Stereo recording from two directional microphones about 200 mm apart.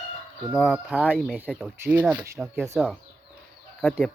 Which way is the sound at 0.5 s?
Centre (ahead or behind).